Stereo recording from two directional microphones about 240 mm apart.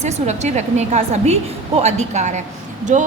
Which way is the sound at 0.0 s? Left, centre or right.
Right.